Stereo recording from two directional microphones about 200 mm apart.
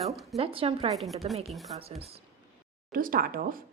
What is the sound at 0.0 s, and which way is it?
Speech, centre (ahead or behind).